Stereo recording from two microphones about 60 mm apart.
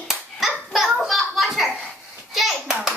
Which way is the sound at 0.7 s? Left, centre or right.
Centre.